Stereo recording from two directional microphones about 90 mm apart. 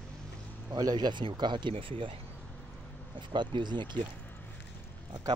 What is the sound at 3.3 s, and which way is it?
Speech, 60° right (ahead or behind).